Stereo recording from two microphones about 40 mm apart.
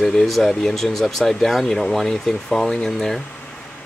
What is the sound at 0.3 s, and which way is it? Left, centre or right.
Speech, centre.